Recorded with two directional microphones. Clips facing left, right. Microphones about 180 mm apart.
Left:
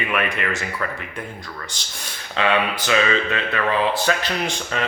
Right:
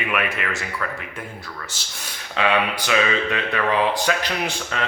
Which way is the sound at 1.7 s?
5° right (ahead or behind).